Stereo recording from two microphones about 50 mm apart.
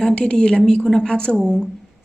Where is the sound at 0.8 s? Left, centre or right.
Centre.